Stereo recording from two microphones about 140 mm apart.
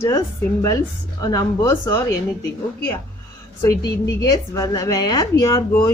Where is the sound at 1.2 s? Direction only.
25° left (ahead or behind).